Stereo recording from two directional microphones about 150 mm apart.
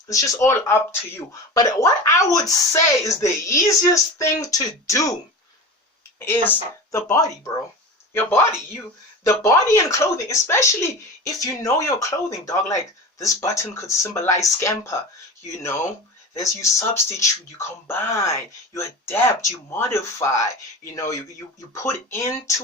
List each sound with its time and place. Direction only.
0.1 s speech: 20° left (ahead or behind)
6.1 s speech: 15° left (ahead or behind)